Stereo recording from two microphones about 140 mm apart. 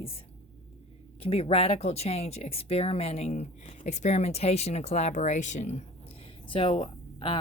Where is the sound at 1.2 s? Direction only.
45° left (ahead or behind).